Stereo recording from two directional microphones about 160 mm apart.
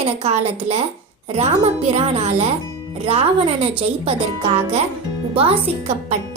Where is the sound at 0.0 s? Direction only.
40° right (ahead or behind).